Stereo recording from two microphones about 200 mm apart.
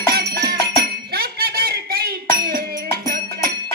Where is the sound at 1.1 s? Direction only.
50° right (ahead or behind).